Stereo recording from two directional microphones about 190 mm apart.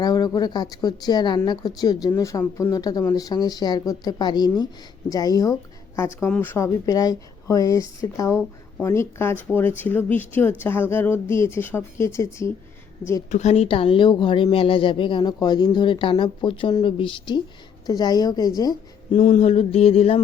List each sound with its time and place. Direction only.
0.0 s a woman's voice: 20° left (ahead or behind)
13.3 s speech: 35° left (ahead or behind); by 18.8 s 20° left (ahead or behind)
19.1 s a sound: 35° left (ahead or behind)